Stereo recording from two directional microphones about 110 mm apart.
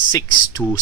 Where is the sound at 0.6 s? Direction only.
10° left (ahead or behind).